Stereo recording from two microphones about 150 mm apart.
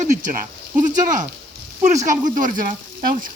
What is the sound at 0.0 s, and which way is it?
Speech, 55° right (ahead or behind).